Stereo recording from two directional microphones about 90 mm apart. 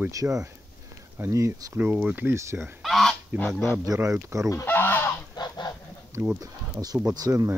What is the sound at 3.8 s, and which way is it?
Speech, 35° right (ahead or behind).